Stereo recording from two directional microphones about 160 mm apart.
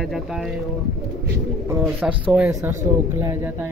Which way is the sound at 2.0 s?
5° right (ahead or behind).